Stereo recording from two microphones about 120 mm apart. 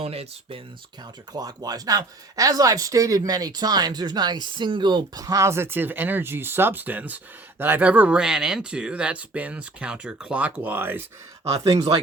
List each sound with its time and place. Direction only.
0.0 s speech: 55° right (ahead or behind)
1.3 s speech: 30° right (ahead or behind); by 11.0 s 15° right (ahead or behind)
11.6 s speech: 30° right (ahead or behind)